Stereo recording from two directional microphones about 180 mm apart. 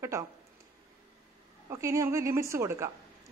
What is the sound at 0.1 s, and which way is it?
Speech, 15° right (ahead or behind).